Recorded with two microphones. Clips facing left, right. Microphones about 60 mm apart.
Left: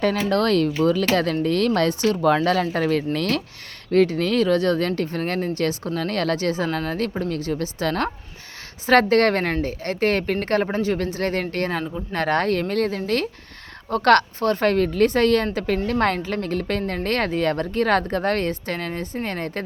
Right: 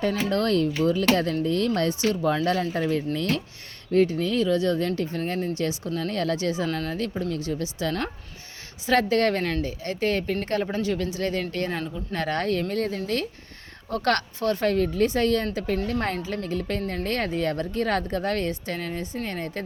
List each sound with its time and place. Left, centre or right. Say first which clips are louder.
0.0 s speech: left 4 dB; left